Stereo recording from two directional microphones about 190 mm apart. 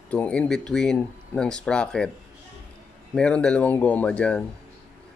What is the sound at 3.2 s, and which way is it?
Speech, 5° left (ahead or behind).